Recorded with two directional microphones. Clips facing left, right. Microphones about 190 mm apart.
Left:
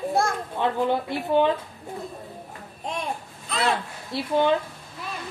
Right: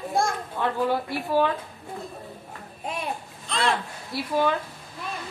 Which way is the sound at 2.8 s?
5° right (ahead or behind).